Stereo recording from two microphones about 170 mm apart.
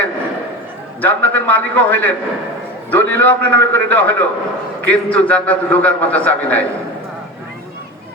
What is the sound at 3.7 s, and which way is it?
A man's voice, 10° left (ahead or behind).